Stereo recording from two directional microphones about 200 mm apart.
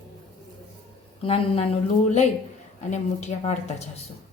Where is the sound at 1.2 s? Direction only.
30° left (ahead or behind).